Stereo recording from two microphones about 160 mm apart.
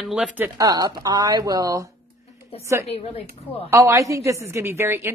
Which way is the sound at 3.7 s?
20° right (ahead or behind).